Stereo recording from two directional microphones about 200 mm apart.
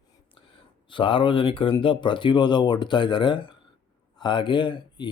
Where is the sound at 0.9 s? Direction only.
25° left (ahead or behind).